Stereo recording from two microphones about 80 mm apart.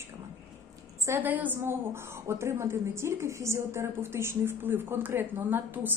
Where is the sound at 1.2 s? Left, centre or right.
Right.